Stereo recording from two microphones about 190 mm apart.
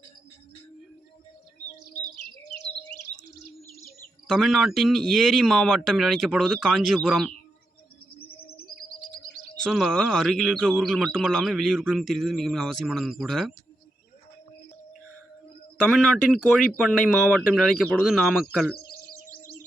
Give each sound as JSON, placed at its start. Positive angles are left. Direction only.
{"t": 4.3, "sound": "speech", "side_deg": 0}
{"t": 8.3, "sound": "bird", "side_deg": 55}
{"t": 9.6, "sound": "speech", "side_deg": 0}
{"t": 15.9, "sound": "speech", "side_deg": 0}